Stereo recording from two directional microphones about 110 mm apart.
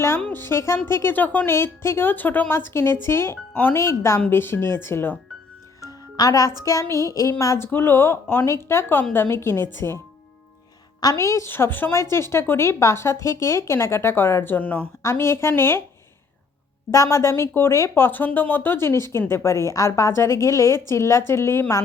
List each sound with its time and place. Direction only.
0.3 s a woman's voice: 20° left (ahead or behind)
5.8 s music: 30° left (ahead or behind)
6.7 s a woman's voice: 30° left (ahead or behind)
11.0 s a woman's voice: 30° left (ahead or behind)
15.0 s a woman's voice: 25° left (ahead or behind)
16.9 s a woman's voice: 25° left (ahead or behind)